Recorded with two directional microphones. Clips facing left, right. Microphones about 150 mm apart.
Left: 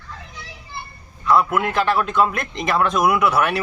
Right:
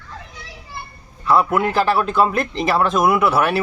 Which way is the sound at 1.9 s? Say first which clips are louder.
Right 2 dB; 35° right (ahead or behind).